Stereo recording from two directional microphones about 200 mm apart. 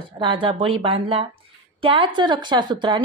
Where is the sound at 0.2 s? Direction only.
25° right (ahead or behind).